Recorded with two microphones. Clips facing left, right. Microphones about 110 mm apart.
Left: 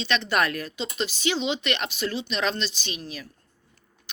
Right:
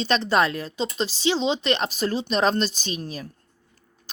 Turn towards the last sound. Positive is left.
turn(degrees=-40)  # may be behind; listen again after turning